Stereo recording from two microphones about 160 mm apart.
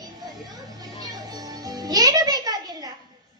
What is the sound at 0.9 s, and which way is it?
Music, 25° right (ahead or behind).